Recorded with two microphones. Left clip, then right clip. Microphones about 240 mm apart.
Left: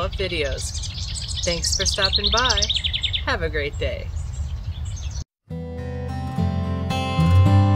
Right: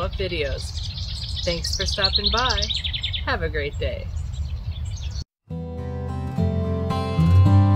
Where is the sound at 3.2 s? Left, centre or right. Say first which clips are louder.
Left 1 dB; centre.